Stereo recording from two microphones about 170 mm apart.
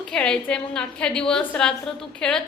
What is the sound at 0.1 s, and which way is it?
Speech, 5° left (ahead or behind).